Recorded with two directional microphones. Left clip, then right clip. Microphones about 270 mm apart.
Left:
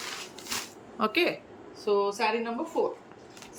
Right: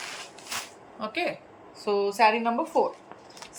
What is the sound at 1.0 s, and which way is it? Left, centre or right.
Speech, centre.